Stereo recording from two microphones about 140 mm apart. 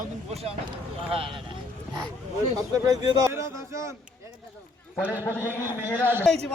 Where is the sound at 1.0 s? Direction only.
40° right (ahead or behind).